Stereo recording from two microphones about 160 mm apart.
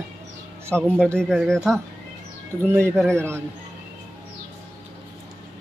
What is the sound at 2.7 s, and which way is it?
Speech, 15° right (ahead or behind).